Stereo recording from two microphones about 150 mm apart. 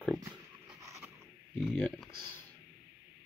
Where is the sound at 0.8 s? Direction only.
20° right (ahead or behind).